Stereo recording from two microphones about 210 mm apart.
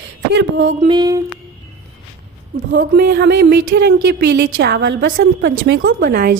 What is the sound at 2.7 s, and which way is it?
Speech, 50° right (ahead or behind).